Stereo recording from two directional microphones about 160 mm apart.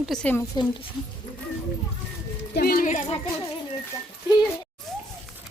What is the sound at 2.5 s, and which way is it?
Speech, 70° left (ahead or behind).